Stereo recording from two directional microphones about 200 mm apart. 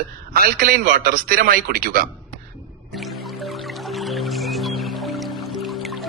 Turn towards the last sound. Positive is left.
turn(degrees=0)  # may be behind; listen again after turning